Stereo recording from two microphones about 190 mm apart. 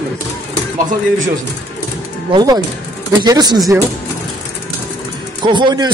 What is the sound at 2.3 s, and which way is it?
A man's voice, 20° right (ahead or behind).